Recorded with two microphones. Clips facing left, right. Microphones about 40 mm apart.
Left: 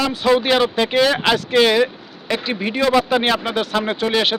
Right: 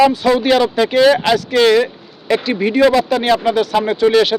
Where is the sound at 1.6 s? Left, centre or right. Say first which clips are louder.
Right 3 dB; centre.